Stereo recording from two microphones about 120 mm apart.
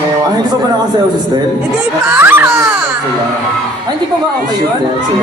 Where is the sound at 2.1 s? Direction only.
15° right (ahead or behind).